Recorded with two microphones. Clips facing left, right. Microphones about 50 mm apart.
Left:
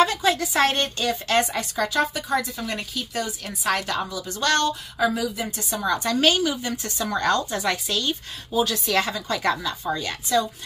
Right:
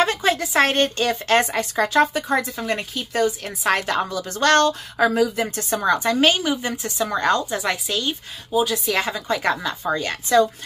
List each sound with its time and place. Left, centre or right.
0.0 s a woman's voice: right
8.5 s a woman's voice: centre; by 10.5 s right